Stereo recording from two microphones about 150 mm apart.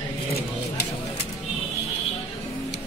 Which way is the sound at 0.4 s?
90° left.